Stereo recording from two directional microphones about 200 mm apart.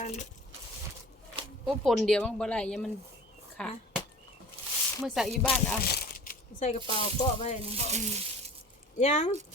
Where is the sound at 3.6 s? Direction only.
5° left (ahead or behind).